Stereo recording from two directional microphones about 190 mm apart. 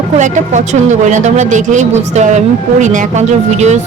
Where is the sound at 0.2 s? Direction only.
40° right (ahead or behind).